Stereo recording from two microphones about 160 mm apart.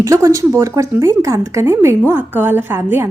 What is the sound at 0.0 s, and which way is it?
A woman's voice, 20° right (ahead or behind).